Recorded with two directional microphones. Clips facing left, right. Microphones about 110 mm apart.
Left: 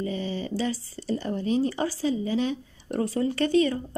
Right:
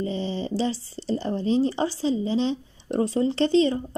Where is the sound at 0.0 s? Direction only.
30° right (ahead or behind).